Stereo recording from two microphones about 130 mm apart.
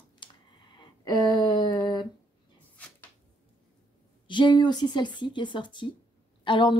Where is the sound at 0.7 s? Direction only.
35° left (ahead or behind).